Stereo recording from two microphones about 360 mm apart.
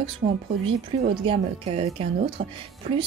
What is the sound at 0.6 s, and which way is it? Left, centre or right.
Speech, centre.